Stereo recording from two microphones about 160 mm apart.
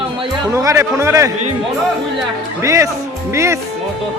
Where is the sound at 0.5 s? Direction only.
20° right (ahead or behind).